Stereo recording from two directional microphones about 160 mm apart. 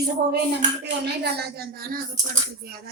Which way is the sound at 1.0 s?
90° right.